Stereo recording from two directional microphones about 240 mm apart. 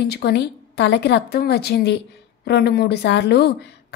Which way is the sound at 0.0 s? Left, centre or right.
Left.